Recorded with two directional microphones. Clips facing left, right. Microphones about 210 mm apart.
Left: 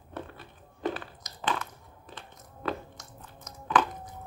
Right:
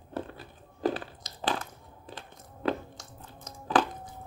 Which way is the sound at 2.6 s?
30° right (ahead or behind).